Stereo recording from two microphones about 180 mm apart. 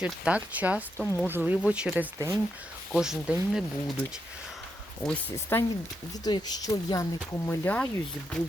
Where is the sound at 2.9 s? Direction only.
5° right (ahead or behind).